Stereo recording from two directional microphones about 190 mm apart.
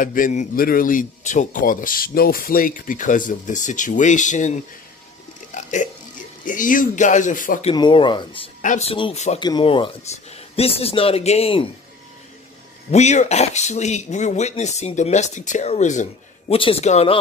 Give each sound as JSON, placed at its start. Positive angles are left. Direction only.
{"t": 0.0, "sound": "a man's voice", "side_deg": 45}
{"t": 5.5, "sound": "burping", "side_deg": 40}
{"t": 6.4, "sound": "a man's voice", "side_deg": 45}
{"t": 7.7, "sound": "speech", "side_deg": 25}
{"t": 9.4, "sound": "speech", "side_deg": 25}
{"t": 12.9, "sound": "speech", "side_deg": 35}